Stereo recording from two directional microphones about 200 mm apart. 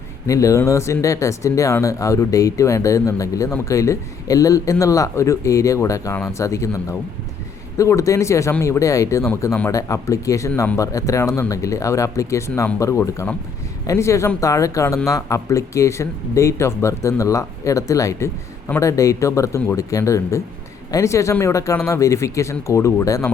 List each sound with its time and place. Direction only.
0.3 s speech: 15° left (ahead or behind)